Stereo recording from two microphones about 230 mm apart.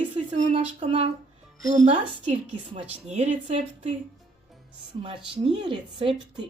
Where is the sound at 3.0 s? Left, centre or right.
Right.